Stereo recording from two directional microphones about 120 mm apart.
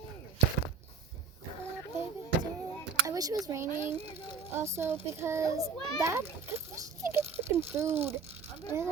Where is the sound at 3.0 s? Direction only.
30° right (ahead or behind).